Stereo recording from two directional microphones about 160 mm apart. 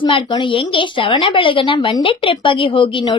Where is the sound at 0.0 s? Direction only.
30° left (ahead or behind).